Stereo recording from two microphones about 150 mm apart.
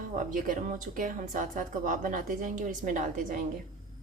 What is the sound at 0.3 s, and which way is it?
A woman's voice, 65° right (ahead or behind).